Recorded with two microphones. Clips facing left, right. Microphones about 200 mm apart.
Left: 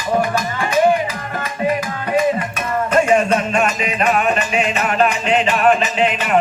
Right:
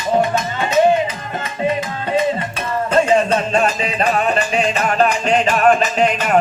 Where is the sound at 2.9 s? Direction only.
30° right (ahead or behind).